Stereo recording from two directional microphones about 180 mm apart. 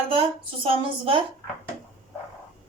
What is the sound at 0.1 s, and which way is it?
Speech, 30° right (ahead or behind).